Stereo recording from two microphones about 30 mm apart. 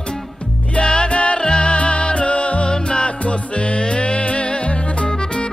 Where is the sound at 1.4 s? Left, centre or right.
Left.